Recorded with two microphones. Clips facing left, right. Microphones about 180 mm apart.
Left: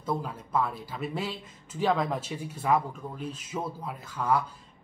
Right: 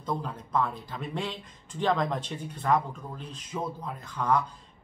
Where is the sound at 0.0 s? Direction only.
5° left (ahead or behind).